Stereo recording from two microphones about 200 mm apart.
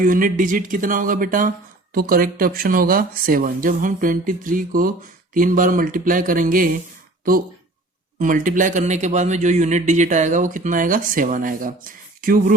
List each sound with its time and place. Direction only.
0.0 s speech: 45° right (ahead or behind)
8.2 s a man's voice: 40° right (ahead or behind)